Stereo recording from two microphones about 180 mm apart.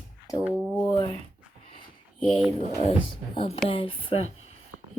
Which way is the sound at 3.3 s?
30° left (ahead or behind).